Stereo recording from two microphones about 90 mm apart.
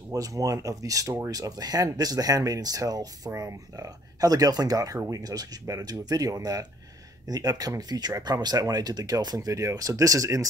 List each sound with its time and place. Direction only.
0.1 s speech: 40° right (ahead or behind)